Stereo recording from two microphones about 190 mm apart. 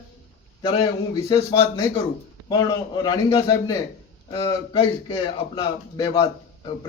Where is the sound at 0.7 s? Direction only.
25° left (ahead or behind).